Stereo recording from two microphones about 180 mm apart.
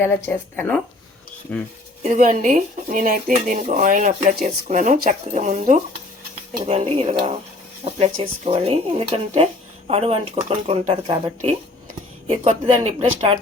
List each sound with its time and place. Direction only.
0.3 s speech: 10° left (ahead or behind)
2.0 s speech: 45° right (ahead or behind)